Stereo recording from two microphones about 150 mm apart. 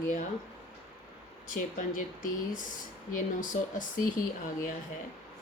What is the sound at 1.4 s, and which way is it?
Speech, 60° left (ahead or behind).